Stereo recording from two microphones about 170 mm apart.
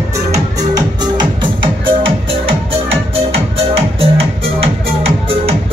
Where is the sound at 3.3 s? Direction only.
35° right (ahead or behind).